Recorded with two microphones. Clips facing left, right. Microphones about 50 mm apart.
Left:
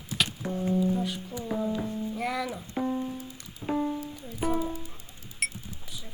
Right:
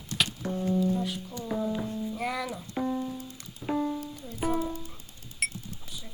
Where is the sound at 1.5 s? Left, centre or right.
Centre.